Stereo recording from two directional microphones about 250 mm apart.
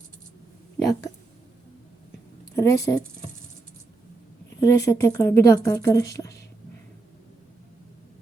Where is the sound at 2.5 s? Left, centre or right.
Centre.